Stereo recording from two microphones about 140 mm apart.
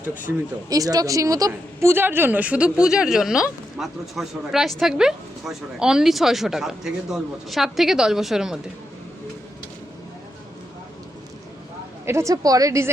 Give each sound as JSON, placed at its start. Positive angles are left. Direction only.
{"t": 0.0, "sound": "speech", "side_deg": -10}
{"t": 0.7, "sound": "a woman's voice", "side_deg": -25}
{"t": 12.0, "sound": "a woman's voice", "side_deg": -20}